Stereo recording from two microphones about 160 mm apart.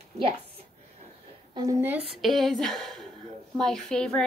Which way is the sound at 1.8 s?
10° right (ahead or behind).